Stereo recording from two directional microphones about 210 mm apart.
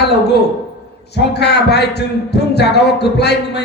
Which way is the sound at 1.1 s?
50° left (ahead or behind).